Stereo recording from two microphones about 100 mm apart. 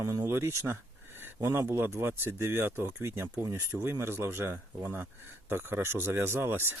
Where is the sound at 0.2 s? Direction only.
25° right (ahead or behind).